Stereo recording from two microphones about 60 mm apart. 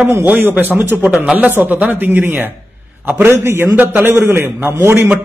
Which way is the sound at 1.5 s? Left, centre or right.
Right.